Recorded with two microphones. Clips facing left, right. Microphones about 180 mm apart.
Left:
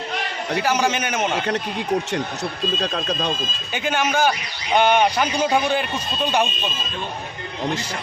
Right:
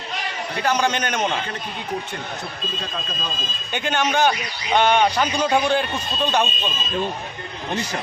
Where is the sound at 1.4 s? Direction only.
75° left (ahead or behind).